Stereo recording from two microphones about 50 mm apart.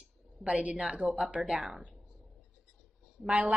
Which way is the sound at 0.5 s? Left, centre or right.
Right.